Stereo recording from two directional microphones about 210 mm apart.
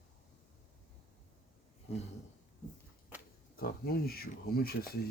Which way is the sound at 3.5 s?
45° left (ahead or behind).